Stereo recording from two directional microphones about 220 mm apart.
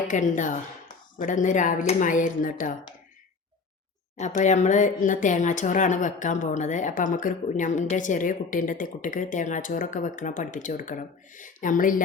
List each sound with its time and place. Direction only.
0.1 s speech: 35° left (ahead or behind)
4.2 s speech: 35° left (ahead or behind)